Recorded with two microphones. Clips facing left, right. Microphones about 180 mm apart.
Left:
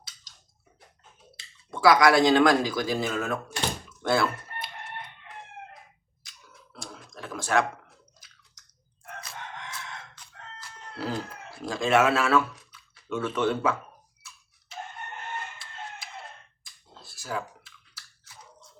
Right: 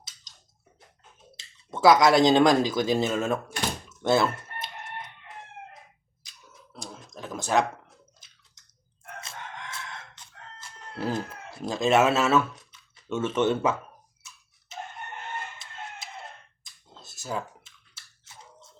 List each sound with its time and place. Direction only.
1.4 s speech: 20° right (ahead or behind)
3.8 s chicken: 25° right (ahead or behind)
6.2 s a sound: 20° right (ahead or behind)
9.2 s chicken: 25° right (ahead or behind)
14.2 s a sound: 20° right (ahead or behind)
15.5 s chicken: 20° right (ahead or behind)
17.0 s chewing: 20° right (ahead or behind)